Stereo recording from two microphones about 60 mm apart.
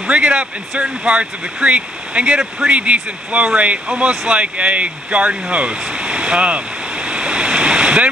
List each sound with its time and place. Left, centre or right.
0.1 s speech: right